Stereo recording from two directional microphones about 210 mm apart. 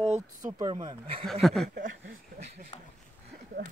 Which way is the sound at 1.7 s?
40° right (ahead or behind).